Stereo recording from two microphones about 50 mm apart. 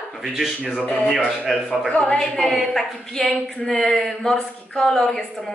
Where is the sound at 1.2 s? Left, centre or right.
Centre.